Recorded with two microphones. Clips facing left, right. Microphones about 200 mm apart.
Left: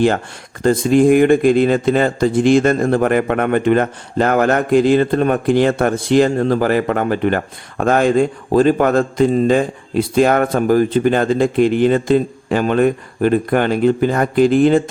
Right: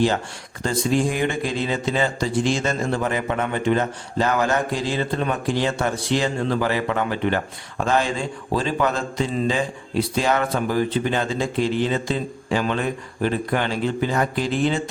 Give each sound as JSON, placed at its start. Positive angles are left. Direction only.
{"t": 0.6, "sound": "speech", "side_deg": 55}